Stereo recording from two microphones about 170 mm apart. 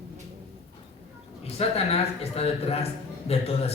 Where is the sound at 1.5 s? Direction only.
35° left (ahead or behind).